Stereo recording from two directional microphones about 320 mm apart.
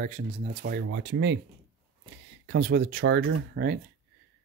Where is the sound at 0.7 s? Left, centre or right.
Right.